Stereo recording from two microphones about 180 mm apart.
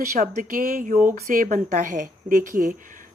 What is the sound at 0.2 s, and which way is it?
A woman's voice, 50° right (ahead or behind).